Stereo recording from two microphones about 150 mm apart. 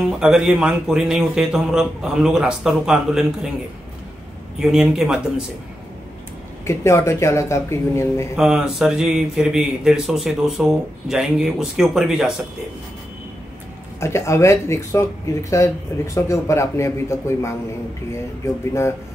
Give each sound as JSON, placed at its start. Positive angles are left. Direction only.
{"t": 0.0, "sound": "speech", "side_deg": -5}
{"t": 4.6, "sound": "speech", "side_deg": -5}
{"t": 6.6, "sound": "speech", "side_deg": 20}
{"t": 8.4, "sound": "speech", "side_deg": -5}
{"t": 13.9, "sound": "a man's voice", "side_deg": 20}